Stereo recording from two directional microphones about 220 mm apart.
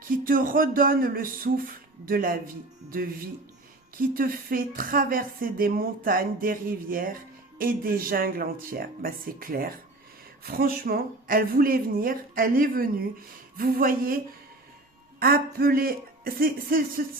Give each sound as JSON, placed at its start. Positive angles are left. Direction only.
{"t": 0.3, "sound": "speech", "side_deg": -40}
{"t": 3.9, "sound": "speech", "side_deg": -40}
{"t": 15.2, "sound": "speech", "side_deg": -45}